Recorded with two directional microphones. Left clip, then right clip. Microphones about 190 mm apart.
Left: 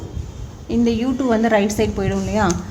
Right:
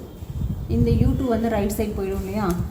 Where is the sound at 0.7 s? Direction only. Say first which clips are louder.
Left 4 dB; 50° left (ahead or behind).